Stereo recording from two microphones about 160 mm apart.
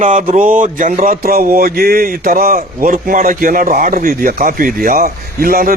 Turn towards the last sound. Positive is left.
turn(degrees=-65)  # may be behind; listen again after turning